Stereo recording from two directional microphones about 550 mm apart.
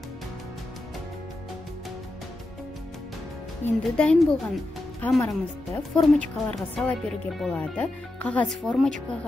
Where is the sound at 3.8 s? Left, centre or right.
Centre.